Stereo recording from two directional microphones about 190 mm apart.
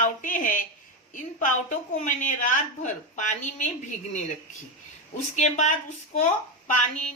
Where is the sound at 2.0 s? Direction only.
40° left (ahead or behind).